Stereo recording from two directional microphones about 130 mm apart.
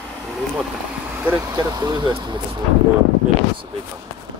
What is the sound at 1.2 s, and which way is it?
Speech, 15° right (ahead or behind).